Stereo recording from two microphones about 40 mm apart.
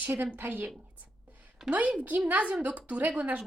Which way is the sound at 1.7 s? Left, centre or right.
Right.